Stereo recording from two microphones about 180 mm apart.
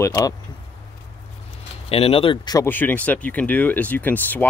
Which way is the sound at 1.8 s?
30° left (ahead or behind).